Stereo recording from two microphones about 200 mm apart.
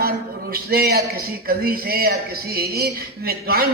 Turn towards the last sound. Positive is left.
turn(degrees=-50)  # may be behind; listen again after turning